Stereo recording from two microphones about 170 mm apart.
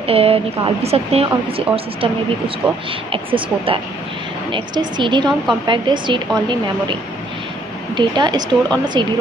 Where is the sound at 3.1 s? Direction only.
30° right (ahead or behind).